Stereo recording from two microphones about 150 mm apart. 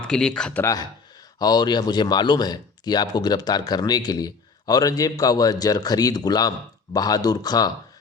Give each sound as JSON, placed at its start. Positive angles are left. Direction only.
{"t": 0.1, "sound": "speech", "side_deg": 5}
{"t": 0.6, "sound": "a man's voice", "side_deg": 25}